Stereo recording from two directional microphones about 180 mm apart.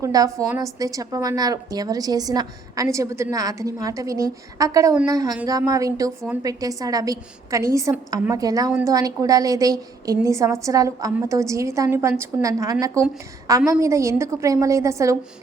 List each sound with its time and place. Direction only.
0.0 s a woman's voice: 20° right (ahead or behind)